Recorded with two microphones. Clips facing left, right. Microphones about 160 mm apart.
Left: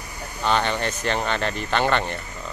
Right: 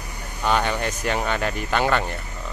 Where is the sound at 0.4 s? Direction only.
10° right (ahead or behind).